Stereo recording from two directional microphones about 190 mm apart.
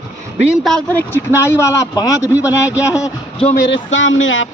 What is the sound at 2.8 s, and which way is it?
Speech, 15° left (ahead or behind).